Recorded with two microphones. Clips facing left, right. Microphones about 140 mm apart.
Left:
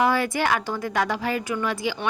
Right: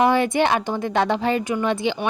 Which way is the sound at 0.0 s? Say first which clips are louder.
Right 4 dB; 20° right (ahead or behind).